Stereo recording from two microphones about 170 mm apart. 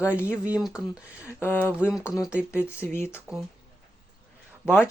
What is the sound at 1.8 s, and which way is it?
Speech, 5° right (ahead or behind).